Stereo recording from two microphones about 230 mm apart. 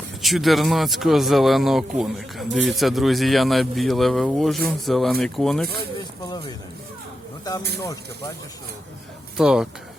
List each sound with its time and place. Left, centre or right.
0.2 s speech: centre
6.0 s a sound: centre
7.8 s speech: centre
9.4 s speech: centre